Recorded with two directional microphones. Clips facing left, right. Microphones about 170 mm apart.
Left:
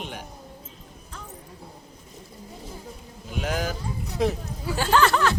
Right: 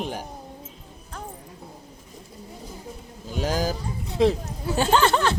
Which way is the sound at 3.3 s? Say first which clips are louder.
Right 3 dB; 35° right (ahead or behind).